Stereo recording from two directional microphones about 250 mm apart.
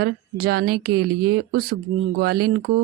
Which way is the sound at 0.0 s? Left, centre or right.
Right.